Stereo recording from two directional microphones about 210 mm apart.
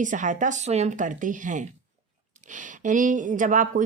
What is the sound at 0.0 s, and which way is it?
Speech, 35° right (ahead or behind).